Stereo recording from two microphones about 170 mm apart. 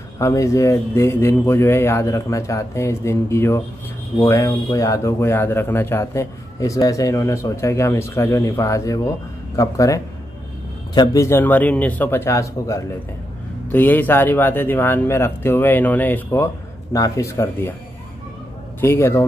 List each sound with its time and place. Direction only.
0.2 s speech: 20° left (ahead or behind)
18.8 s speech: 15° left (ahead or behind)